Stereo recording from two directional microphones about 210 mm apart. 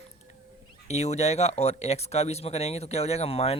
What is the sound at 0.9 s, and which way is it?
A man's voice, 30° left (ahead or behind).